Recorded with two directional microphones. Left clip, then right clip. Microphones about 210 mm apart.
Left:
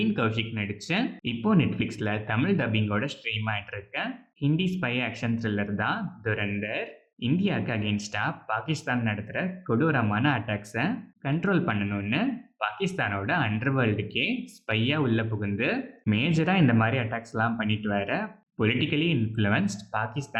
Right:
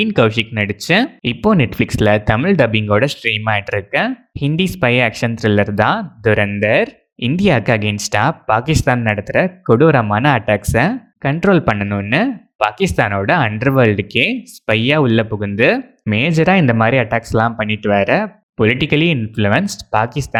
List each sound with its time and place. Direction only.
0.0 s speech: 45° right (ahead or behind)